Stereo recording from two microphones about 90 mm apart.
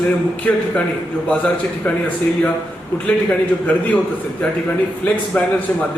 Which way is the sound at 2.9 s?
15° left (ahead or behind).